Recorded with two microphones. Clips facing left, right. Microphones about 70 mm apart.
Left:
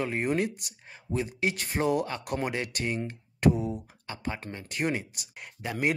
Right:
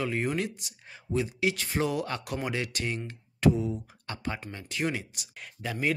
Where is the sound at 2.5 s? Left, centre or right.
Left.